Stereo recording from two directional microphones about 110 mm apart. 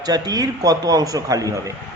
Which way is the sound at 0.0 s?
35° right (ahead or behind).